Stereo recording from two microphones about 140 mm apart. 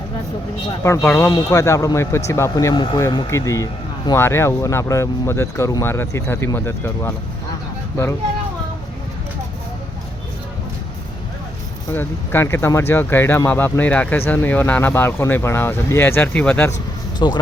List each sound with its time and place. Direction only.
0.8 s speech: 20° left (ahead or behind)
11.9 s speech: 15° left (ahead or behind)
17.2 s speech: 35° left (ahead or behind)